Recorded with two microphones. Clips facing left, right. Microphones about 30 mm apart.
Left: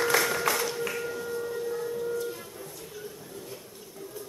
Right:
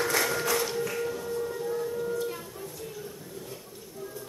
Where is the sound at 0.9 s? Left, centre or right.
Centre.